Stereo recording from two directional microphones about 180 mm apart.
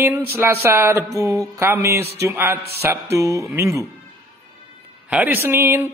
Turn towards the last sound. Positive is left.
turn(degrees=-15)  # may be behind; listen again after turning